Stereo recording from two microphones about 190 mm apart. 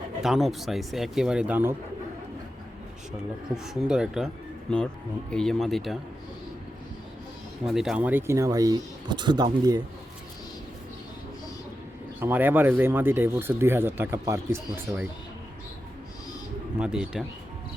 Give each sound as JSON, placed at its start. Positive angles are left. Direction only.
{"t": 0.2, "sound": "speech", "side_deg": 0}
{"t": 3.1, "sound": "speech", "side_deg": -5}
{"t": 7.6, "sound": "speech", "side_deg": 0}
{"t": 12.2, "sound": "speech", "side_deg": -10}
{"t": 16.7, "sound": "speech", "side_deg": -5}